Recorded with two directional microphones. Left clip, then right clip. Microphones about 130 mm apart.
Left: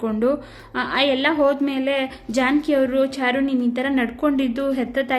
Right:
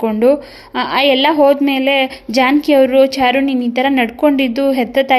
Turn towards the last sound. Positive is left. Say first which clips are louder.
# right 9 dB
turn(degrees=-25)  # may be behind; listen again after turning